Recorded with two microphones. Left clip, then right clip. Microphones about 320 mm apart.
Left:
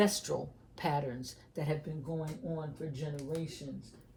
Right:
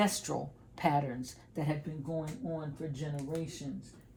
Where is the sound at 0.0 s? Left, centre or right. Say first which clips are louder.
Left 1 dB; centre.